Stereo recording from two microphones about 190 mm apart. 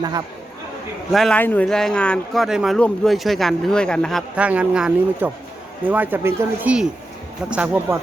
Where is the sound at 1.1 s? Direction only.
5° left (ahead or behind).